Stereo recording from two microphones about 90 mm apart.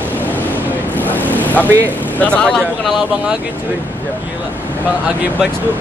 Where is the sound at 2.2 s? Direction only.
15° left (ahead or behind).